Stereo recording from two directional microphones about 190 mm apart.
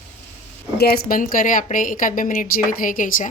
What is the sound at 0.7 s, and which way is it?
A woman's voice, 55° left (ahead or behind).